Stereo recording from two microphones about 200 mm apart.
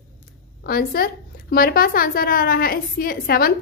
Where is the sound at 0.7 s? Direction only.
50° left (ahead or behind).